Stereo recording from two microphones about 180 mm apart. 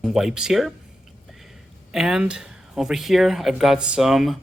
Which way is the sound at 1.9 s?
5° right (ahead or behind).